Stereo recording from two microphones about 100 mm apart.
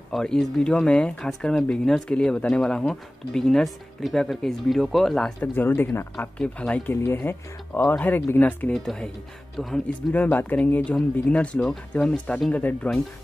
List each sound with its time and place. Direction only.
0.1 s speech: 5° left (ahead or behind)
5.4 s speech: 20° left (ahead or behind)
6.9 s speech: 20° left (ahead or behind)
8.7 s speech: 5° left (ahead or behind)
10.1 s speech: 15° left (ahead or behind)